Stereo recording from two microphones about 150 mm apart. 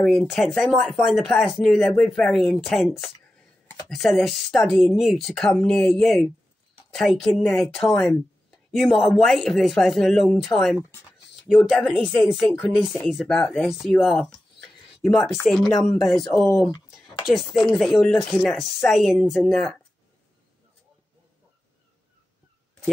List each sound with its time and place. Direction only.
0.0 s speech: centre (ahead or behind)
12.3 s speech: centre (ahead or behind)
16.3 s speech: 20° left (ahead or behind)
17.3 s speech: centre (ahead or behind)